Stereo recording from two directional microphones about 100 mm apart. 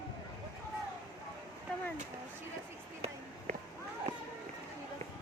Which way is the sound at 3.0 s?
90° right.